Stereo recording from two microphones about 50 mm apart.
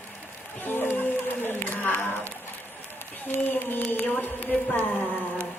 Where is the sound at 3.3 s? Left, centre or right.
Left.